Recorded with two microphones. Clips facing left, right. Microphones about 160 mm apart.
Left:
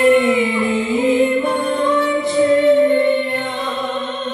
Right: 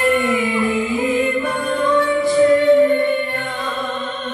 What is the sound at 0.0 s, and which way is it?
Music, 20° left (ahead or behind).